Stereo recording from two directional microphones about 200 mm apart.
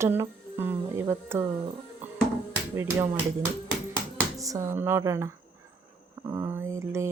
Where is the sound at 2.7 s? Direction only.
15° right (ahead or behind).